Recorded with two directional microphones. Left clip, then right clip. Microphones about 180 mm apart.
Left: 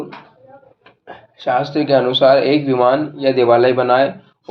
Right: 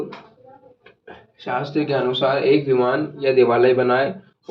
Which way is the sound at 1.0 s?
20° left (ahead or behind).